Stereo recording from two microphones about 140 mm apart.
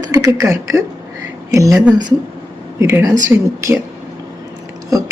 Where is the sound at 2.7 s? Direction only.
20° right (ahead or behind).